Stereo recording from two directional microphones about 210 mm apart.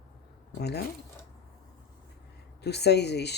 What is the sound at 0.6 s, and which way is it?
Speech, 50° left (ahead or behind).